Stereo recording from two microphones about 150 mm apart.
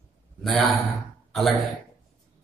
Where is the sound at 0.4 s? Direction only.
Centre (ahead or behind).